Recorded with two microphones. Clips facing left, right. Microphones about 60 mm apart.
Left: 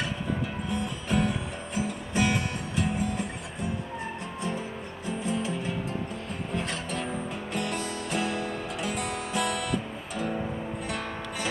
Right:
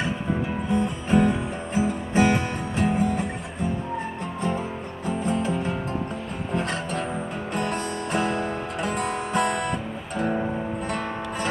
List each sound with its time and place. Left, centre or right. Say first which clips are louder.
0.7 s music: right 8 dB; right
5.0 s music: right 5 dB; right